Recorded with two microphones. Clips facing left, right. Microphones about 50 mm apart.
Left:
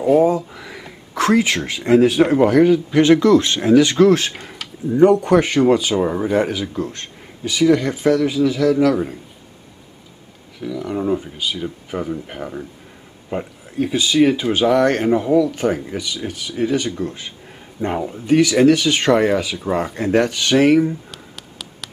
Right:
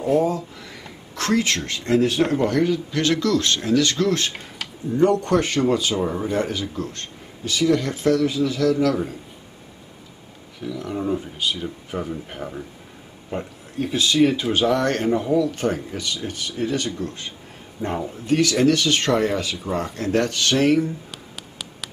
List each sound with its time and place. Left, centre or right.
0.0 s speech: centre
2.6 s speech: centre
4.3 s speech: centre
10.6 s speech: centre
21.1 s a sound: centre